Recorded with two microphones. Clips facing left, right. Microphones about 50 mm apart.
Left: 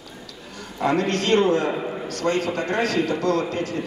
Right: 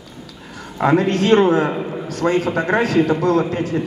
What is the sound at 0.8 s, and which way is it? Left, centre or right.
A man's voice, centre.